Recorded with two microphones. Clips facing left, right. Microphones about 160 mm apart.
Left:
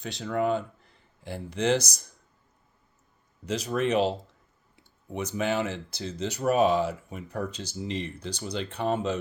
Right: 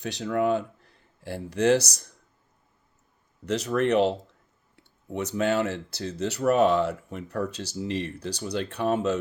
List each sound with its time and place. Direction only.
0.0 s speech: 70° right (ahead or behind)
3.4 s speech: 65° right (ahead or behind)